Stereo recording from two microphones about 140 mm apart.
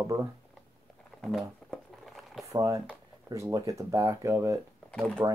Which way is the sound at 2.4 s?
25° right (ahead or behind).